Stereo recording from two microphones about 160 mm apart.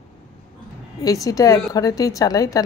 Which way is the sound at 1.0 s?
20° left (ahead or behind).